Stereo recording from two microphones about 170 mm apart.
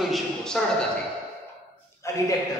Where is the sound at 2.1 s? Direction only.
20° left (ahead or behind).